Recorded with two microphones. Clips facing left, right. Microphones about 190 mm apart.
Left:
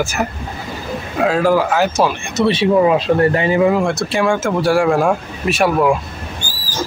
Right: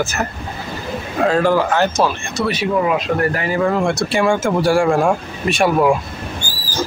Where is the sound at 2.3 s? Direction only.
25° left (ahead or behind).